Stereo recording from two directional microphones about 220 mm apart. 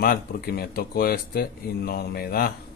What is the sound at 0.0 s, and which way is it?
Speech, 45° left (ahead or behind).